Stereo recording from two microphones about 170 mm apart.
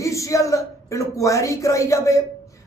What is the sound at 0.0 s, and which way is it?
A woman's voice, 20° left (ahead or behind).